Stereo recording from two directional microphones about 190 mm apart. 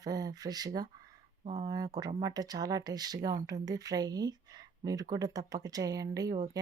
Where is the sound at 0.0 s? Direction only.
20° right (ahead or behind).